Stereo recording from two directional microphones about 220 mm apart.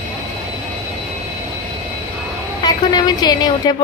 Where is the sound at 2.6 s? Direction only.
20° left (ahead or behind).